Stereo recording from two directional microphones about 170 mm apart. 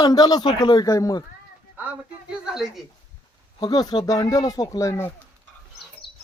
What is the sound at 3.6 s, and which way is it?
Speech, 25° left (ahead or behind).